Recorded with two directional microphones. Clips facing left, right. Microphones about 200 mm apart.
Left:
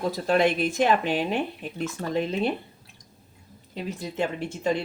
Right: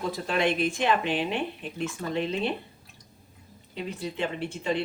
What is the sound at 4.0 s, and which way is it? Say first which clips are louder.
Speech: left 2 dB; 40° left (ahead or behind).